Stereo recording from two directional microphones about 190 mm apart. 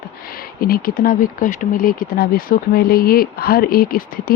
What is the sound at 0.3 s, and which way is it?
Speech, 50° left (ahead or behind).